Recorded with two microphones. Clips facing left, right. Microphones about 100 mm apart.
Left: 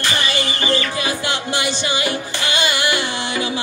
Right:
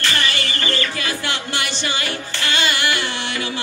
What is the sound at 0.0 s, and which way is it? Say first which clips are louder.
Music: left 1 dB; 15° left (ahead or behind).